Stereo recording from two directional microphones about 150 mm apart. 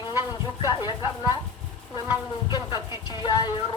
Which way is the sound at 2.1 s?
30° left (ahead or behind).